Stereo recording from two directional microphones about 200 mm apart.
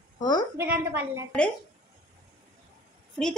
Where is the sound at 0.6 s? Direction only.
10° right (ahead or behind).